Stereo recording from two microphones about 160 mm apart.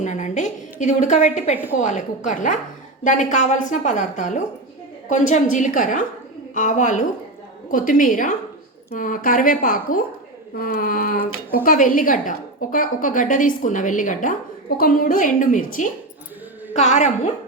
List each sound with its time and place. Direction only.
0.0 s a woman's voice: 50° left (ahead or behind)